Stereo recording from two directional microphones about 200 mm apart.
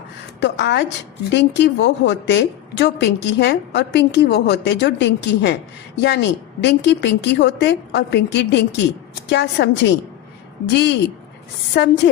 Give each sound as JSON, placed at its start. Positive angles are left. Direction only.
{"t": 0.3, "sound": "a woman's voice", "side_deg": 60}